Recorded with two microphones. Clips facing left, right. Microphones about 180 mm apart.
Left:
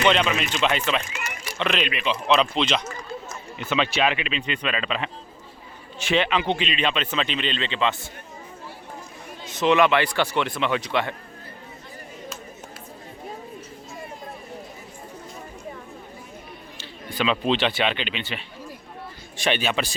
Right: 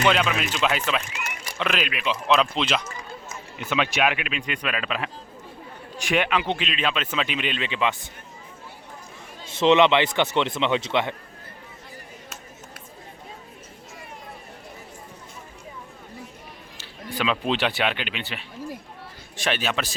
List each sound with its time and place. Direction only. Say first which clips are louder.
0.1 s speech: left 1 dB; 5° right (ahead or behind)
9.5 s speech: right 2 dB; 25° right (ahead or behind)
17.2 s speech: left 2 dB; 5° right (ahead or behind)